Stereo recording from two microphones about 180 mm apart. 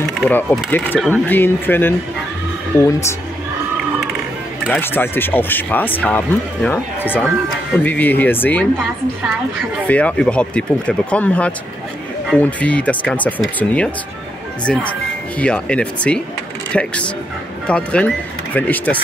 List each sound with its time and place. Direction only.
0.3 s speech: 10° left (ahead or behind)
4.6 s speech: 10° left (ahead or behind)
9.8 s speech: 5° left (ahead or behind)